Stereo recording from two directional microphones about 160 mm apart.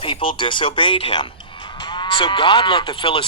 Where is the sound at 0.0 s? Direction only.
35° left (ahead or behind).